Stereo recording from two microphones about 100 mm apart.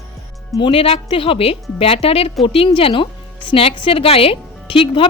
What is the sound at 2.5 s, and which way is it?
A woman's voice, 65° left (ahead or behind).